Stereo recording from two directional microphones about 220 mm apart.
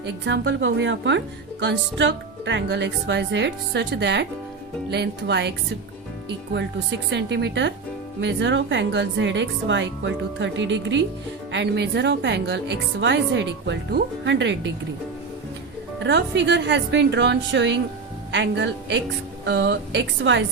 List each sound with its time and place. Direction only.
0.0 s speech: 55° right (ahead or behind)
16.0 s a woman's voice: 50° right (ahead or behind)